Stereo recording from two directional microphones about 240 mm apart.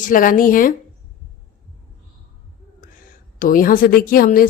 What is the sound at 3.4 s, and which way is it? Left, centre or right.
Speech, left.